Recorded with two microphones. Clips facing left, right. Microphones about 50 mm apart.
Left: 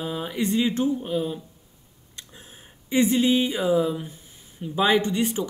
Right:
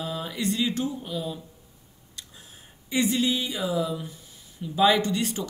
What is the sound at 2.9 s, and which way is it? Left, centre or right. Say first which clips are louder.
Speech: left 4 dB; left.